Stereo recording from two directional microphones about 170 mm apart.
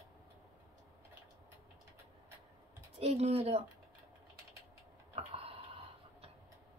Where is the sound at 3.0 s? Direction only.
40° right (ahead or behind).